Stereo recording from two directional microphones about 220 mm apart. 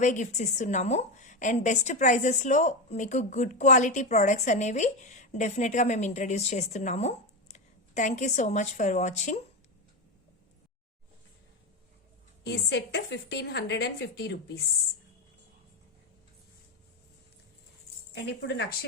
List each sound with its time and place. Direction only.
0.0 s a woman's voice: 35° left (ahead or behind)
12.4 s a woman's voice: 50° left (ahead or behind)
18.1 s a woman's voice: 50° left (ahead or behind)